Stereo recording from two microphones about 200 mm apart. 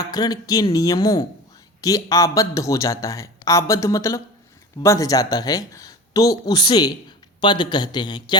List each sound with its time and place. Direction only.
0.0 s a man's voice: 20° left (ahead or behind)